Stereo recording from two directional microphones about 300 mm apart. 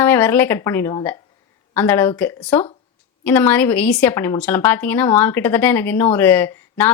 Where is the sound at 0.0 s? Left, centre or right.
Centre.